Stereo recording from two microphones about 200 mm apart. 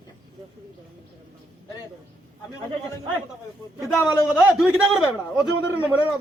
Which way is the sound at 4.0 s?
5° right (ahead or behind).